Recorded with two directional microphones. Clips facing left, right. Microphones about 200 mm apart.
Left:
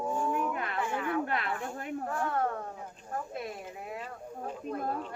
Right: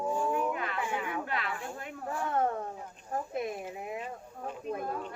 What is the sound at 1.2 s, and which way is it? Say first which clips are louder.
Snake: left 2 dB; 50° left (ahead or behind).